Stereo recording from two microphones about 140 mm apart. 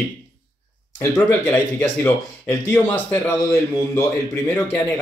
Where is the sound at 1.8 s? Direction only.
15° left (ahead or behind).